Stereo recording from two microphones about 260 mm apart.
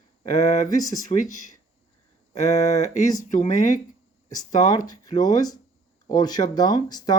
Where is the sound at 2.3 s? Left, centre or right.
Left.